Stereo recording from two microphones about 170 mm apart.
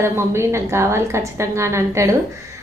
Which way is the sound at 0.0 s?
15° right (ahead or behind).